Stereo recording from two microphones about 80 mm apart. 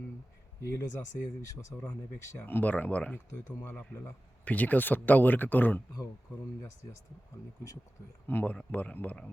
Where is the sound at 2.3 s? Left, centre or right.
Left.